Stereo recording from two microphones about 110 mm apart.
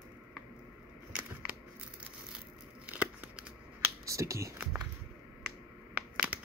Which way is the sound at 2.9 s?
10° right (ahead or behind).